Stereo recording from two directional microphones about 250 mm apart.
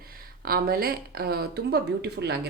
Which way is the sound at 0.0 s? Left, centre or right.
Right.